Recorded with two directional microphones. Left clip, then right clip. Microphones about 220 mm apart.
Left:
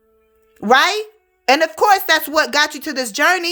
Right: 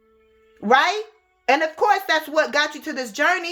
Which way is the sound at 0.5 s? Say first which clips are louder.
Left 4 dB; 45° left (ahead or behind).